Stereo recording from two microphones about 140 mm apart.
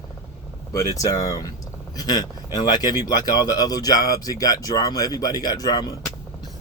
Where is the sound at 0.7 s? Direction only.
25° left (ahead or behind).